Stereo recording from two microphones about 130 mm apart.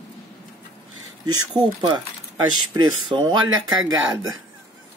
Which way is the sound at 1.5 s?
35° right (ahead or behind).